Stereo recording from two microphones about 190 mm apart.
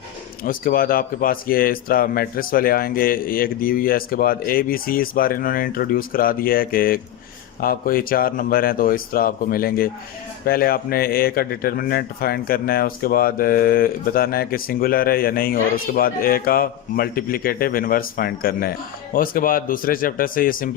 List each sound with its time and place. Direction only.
0.4 s a man's voice: 50° left (ahead or behind)